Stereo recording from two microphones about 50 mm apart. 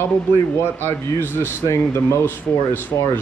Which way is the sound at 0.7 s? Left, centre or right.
Left.